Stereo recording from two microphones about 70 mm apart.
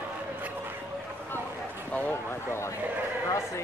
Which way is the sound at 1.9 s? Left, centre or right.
Centre.